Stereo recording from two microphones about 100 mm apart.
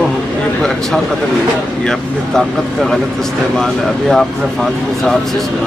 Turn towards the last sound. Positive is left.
turn(degrees=5)  # may be behind; listen again after turning